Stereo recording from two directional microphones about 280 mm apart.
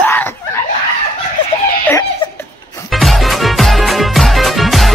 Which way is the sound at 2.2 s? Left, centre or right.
Centre.